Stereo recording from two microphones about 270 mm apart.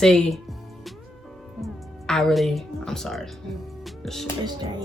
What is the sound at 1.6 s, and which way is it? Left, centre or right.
Speech, centre.